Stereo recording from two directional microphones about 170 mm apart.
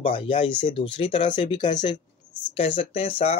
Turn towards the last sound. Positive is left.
turn(degrees=35)  # may be behind; listen again after turning